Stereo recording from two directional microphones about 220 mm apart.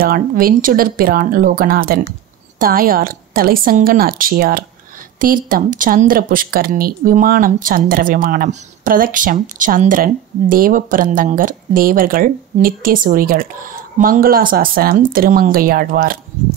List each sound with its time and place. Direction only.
0.0 s speech: 40° right (ahead or behind)